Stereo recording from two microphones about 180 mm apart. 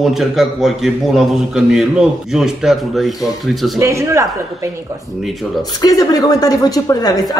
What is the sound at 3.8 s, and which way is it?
Speech, 15° right (ahead or behind).